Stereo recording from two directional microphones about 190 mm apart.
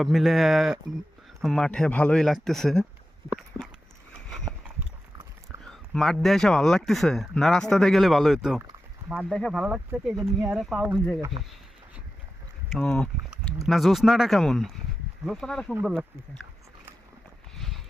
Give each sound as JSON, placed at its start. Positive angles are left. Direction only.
{"t": 0.0, "sound": "speech", "side_deg": 0}
{"t": 5.5, "sound": "a sound", "side_deg": -15}
{"t": 5.9, "sound": "speech", "side_deg": 0}
{"t": 12.7, "sound": "speech", "side_deg": 5}
{"t": 17.5, "sound": "clip-clop", "side_deg": 0}